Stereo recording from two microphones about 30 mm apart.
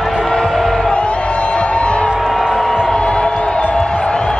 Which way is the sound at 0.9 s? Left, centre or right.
Left.